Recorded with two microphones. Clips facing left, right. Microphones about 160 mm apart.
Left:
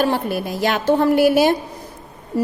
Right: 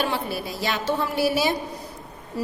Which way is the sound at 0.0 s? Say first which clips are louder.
Left 7 dB; 45° left (ahead or behind).